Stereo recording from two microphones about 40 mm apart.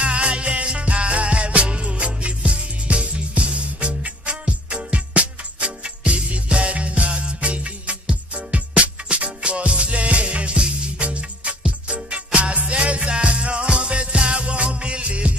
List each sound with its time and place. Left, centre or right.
0.0 s music: right